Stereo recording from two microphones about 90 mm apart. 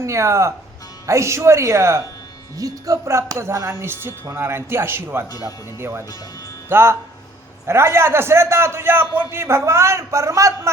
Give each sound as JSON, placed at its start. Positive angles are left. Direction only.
{"t": 0.0, "sound": "a man's voice", "side_deg": -30}